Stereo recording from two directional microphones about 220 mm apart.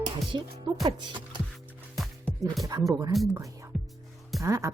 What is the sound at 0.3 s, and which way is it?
Speech, 20° right (ahead or behind).